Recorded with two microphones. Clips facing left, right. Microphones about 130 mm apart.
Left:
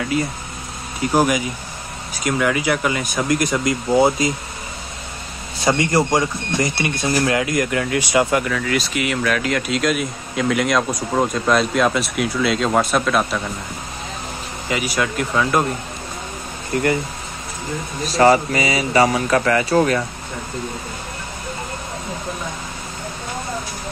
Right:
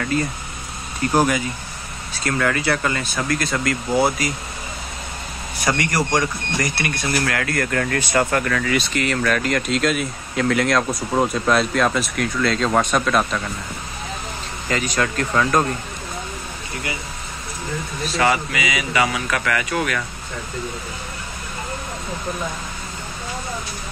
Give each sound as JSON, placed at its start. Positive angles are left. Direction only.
{"t": 0.0, "sound": "speech", "side_deg": 10}
{"t": 5.6, "sound": "speech", "side_deg": 25}
{"t": 14.7, "sound": "speech", "side_deg": 10}
{"t": 16.7, "sound": "speech", "side_deg": 45}
{"t": 18.0, "sound": "speech", "side_deg": 35}